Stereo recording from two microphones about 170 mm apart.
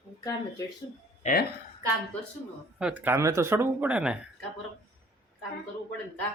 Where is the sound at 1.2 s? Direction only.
55° left (ahead or behind).